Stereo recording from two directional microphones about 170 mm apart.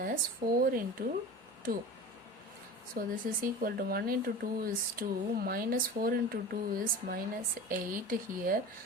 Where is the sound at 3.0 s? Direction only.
55° right (ahead or behind).